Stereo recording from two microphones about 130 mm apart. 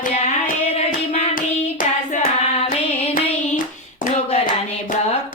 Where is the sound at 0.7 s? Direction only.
55° left (ahead or behind).